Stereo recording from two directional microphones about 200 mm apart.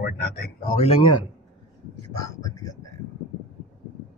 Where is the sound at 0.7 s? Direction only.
30° left (ahead or behind).